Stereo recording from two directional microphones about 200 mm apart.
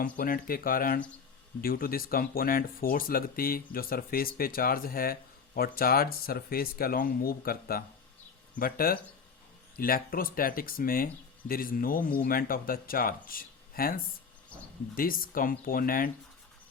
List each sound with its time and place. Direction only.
0.2 s speech: 45° left (ahead or behind)
14.5 s speech: 5° left (ahead or behind)
14.9 s speech: 45° left (ahead or behind)